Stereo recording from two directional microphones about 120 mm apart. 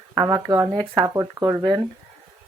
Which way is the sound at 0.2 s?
35° right (ahead or behind).